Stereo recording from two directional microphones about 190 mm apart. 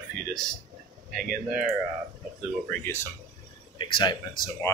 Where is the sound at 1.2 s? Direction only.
45° right (ahead or behind).